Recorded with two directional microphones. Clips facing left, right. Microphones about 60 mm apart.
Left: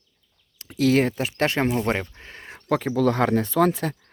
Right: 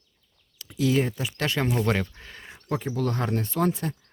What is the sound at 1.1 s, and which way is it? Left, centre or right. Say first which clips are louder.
Speech: left 5 dB; left.